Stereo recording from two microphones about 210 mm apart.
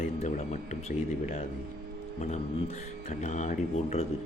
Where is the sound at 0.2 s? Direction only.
35° left (ahead or behind).